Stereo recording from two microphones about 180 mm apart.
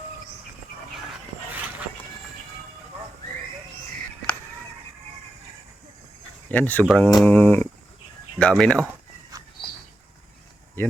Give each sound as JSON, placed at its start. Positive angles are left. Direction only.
{"t": 4.2, "sound": "a sound", "side_deg": 5}
{"t": 6.5, "sound": "speech", "side_deg": 10}
{"t": 9.3, "sound": "bird", "side_deg": -20}